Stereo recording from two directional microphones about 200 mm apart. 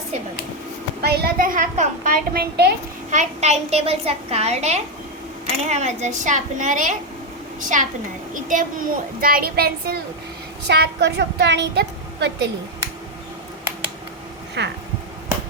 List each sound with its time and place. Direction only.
1.0 s a child's voice: 50° right (ahead or behind)
2.3 s a child's voice: 55° right (ahead or behind)
3.1 s a child's voice: 35° right (ahead or behind); by 12.5 s 55° right (ahead or behind)
14.6 s a woman's voice: 60° right (ahead or behind)